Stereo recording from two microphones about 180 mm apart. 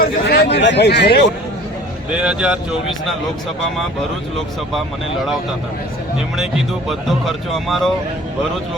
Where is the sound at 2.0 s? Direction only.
5° right (ahead or behind).